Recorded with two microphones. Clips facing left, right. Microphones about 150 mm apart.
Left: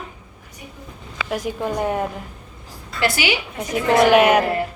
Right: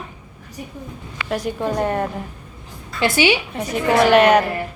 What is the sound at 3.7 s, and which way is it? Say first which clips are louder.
Speech: even; 10° left (ahead or behind).